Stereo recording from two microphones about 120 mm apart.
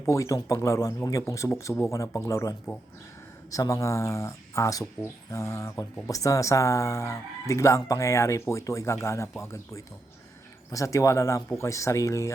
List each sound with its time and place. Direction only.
0.1 s speech: 25° left (ahead or behind)